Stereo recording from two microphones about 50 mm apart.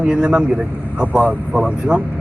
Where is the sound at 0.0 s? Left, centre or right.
Centre.